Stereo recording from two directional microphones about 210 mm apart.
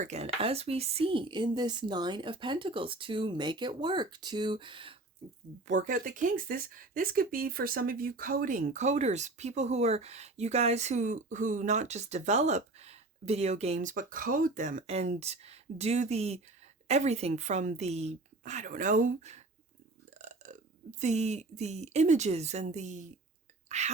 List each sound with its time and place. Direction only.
0.0 s speech: 30° right (ahead or behind)
5.6 s speech: 35° right (ahead or behind)
20.2 s burping: 35° right (ahead or behind)
21.0 s speech: 35° right (ahead or behind)
23.6 s whispering: 35° right (ahead or behind)